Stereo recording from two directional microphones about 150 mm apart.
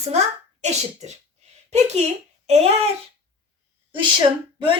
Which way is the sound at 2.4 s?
45° right (ahead or behind).